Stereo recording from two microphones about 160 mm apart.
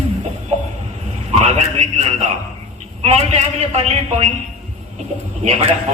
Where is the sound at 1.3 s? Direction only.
45° right (ahead or behind).